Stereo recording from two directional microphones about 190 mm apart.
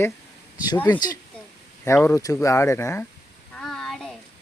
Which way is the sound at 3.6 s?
Centre (ahead or behind).